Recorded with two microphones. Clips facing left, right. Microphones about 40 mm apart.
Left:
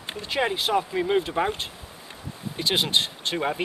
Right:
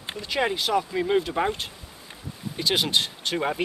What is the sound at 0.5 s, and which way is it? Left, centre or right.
Speech, left.